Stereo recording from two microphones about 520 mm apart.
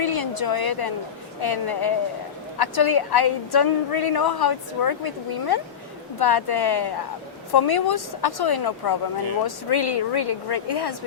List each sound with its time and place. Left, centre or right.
0.0 s a woman's voice: left